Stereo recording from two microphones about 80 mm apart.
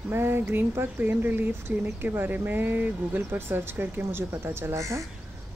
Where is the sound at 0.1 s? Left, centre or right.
Right.